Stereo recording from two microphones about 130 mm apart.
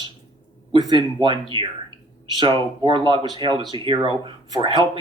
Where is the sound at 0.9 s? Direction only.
40° right (ahead or behind).